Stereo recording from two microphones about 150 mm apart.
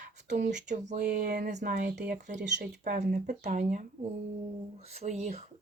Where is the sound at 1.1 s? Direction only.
90° right.